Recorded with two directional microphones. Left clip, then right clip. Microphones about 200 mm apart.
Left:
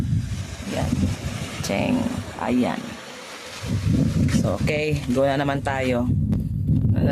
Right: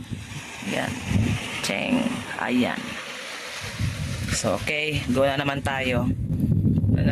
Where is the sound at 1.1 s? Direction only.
65° left (ahead or behind).